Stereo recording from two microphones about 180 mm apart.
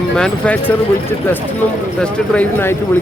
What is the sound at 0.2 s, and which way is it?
Speech, 5° left (ahead or behind).